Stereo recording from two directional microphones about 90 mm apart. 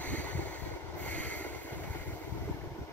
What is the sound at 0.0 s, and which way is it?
Boat, 15° left (ahead or behind).